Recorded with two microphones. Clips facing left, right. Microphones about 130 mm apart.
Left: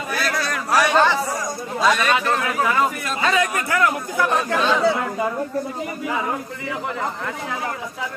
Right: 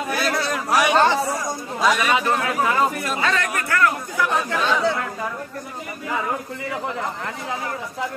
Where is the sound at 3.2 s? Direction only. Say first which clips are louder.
Left 5 dB; 10° left (ahead or behind).